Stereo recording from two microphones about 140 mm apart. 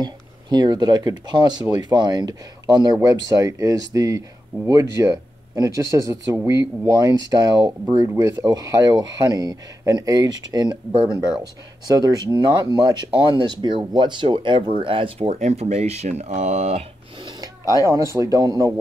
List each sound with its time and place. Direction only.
0.0 s speech: 30° right (ahead or behind)
7.9 s speech: 20° right (ahead or behind); by 16.8 s 50° right (ahead or behind)
17.8 s speech: 25° right (ahead or behind)